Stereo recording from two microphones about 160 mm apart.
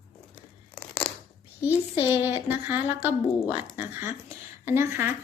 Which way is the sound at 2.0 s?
15° right (ahead or behind).